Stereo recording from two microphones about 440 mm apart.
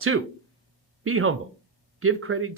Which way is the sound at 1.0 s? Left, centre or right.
Right.